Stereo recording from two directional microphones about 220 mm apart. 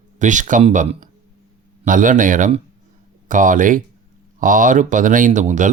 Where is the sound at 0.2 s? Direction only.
35° right (ahead or behind).